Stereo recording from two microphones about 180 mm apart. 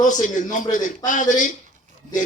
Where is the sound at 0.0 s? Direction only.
45° left (ahead or behind).